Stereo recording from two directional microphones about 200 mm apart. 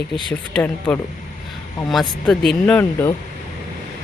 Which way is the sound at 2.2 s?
5° left (ahead or behind).